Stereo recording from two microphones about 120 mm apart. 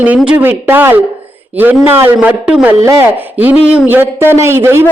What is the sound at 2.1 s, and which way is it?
A man's voice, 5° right (ahead or behind).